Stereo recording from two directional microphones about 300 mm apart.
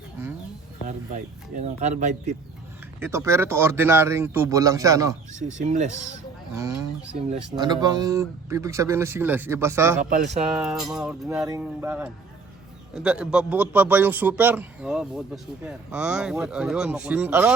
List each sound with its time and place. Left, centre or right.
0.9 s speech: right
3.0 s speech: centre
5.3 s speech: right
7.5 s speech: centre
10.0 s speech: right
10.5 s a man's voice: centre